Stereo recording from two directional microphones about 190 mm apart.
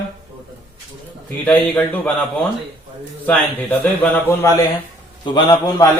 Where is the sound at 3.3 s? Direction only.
10° left (ahead or behind).